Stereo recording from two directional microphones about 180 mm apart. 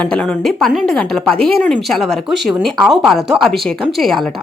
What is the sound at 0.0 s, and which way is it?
A woman's voice, 5° left (ahead or behind).